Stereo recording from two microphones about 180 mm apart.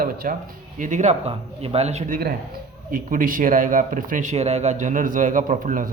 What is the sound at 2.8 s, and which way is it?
A man's voice, 50° right (ahead or behind).